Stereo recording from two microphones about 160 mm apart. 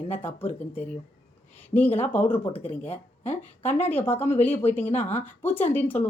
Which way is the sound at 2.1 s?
10° left (ahead or behind).